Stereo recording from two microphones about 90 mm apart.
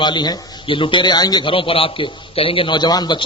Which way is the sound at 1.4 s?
75° left (ahead or behind).